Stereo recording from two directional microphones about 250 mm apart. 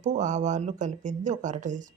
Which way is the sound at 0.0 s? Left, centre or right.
Right.